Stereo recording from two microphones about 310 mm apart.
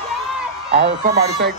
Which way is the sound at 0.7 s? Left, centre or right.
Right.